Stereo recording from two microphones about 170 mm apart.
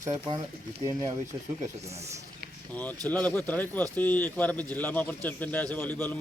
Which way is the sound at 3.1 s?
10° left (ahead or behind).